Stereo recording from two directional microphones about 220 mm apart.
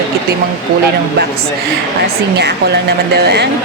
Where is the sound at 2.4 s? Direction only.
50° right (ahead or behind).